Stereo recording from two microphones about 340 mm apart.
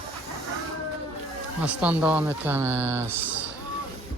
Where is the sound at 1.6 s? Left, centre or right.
Centre.